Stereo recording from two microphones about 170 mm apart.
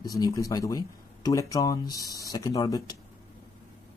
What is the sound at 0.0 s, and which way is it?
Speech, 20° left (ahead or behind).